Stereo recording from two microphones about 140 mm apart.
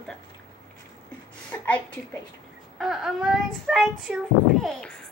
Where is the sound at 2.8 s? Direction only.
Centre (ahead or behind).